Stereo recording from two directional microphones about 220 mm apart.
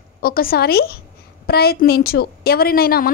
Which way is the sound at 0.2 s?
40° left (ahead or behind).